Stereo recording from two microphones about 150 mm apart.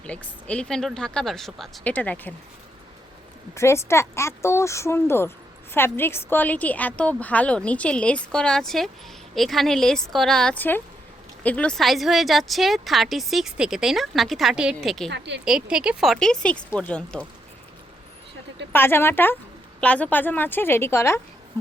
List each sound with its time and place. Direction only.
0.0 s speech: 10° left (ahead or behind)
3.5 s a woman's voice: 20° left (ahead or behind)
18.7 s a woman's voice: 15° left (ahead or behind)